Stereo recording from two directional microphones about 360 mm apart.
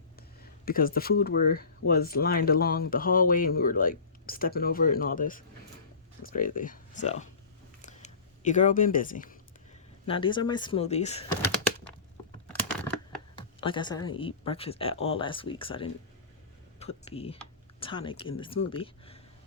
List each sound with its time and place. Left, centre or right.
0.2 s speech: left
7.8 s a sound: left
10.1 s speech: centre
13.4 s speech: centre